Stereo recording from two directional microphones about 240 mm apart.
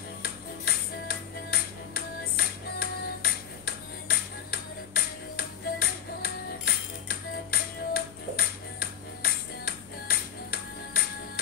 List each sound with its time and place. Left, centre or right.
0.2 s music: left